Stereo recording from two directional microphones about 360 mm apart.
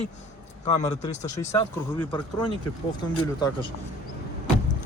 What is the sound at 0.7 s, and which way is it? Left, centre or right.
Speech, centre.